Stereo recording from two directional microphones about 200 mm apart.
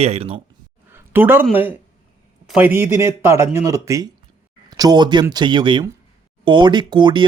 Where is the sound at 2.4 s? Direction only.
10° right (ahead or behind).